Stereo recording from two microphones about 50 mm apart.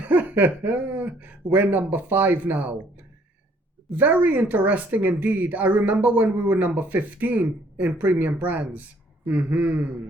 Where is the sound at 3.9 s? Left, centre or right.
Right.